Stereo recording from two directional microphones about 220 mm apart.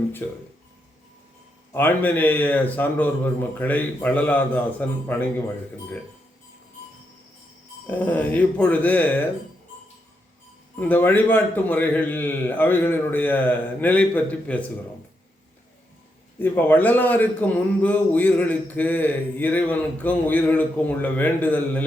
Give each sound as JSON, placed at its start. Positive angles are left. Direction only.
{"t": 1.7, "sound": "a man's voice", "side_deg": 10}
{"t": 7.9, "sound": "a man's voice", "side_deg": 10}
{"t": 10.8, "sound": "a man's voice", "side_deg": 10}
{"t": 16.4, "sound": "a man's voice", "side_deg": 10}